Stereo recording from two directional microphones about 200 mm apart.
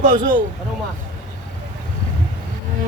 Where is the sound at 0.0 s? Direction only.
40° right (ahead or behind).